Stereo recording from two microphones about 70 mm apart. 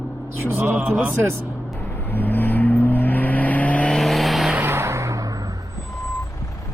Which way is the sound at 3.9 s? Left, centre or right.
Centre.